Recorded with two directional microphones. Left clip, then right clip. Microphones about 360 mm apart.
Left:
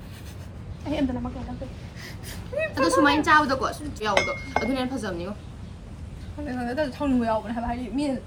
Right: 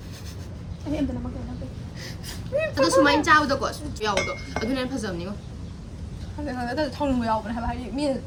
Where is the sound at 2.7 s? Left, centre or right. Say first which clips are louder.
Right 1 dB; centre.